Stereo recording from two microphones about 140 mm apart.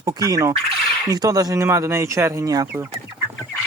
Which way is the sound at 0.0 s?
25° right (ahead or behind).